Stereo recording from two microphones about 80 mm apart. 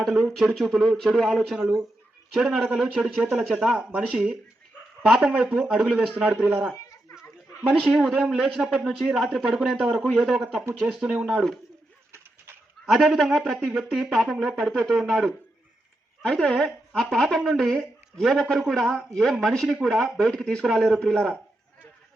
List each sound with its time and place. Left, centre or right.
0.0 s speech: centre
2.8 s speech: centre
3.2 s speech: centre
4.1 s speech: centre
6.7 s a sound: left
7.8 s speech: centre
11.3 s speech: centre
12.8 s speech: centre
16.2 s speech: centre
20.7 s speech: centre